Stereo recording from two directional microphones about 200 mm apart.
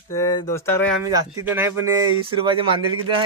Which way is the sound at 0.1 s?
15° left (ahead or behind).